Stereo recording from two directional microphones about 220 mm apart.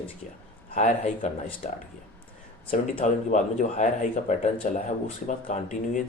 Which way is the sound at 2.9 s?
35° left (ahead or behind).